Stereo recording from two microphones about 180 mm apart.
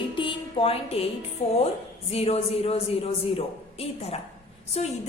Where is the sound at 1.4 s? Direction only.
35° left (ahead or behind).